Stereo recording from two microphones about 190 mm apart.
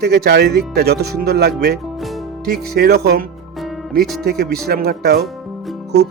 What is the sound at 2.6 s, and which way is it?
Speech, 55° right (ahead or behind).